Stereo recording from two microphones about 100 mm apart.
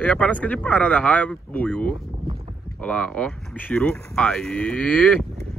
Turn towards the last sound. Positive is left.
turn(degrees=10)  # may be behind; listen again after turning